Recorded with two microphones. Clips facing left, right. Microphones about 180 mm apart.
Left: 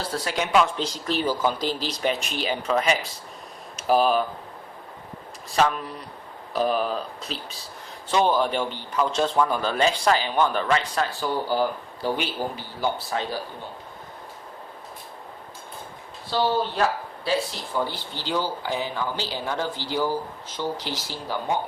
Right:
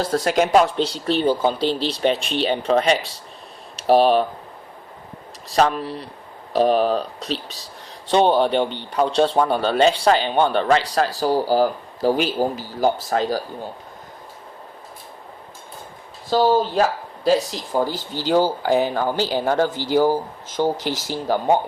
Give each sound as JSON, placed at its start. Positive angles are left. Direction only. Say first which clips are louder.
{"t": 0.0, "sound": "speech", "louder": "right 9 dB", "side_deg": -45}
{"t": 5.5, "sound": "speech", "louder": "right 4 dB", "side_deg": -35}
{"t": 17.2, "sound": "speech", "louder": "right 7 dB", "side_deg": -40}